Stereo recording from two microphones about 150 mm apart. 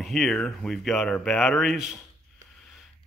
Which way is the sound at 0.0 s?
Centre (ahead or behind).